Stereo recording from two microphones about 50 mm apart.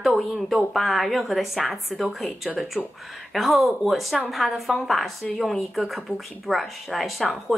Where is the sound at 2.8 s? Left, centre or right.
Right.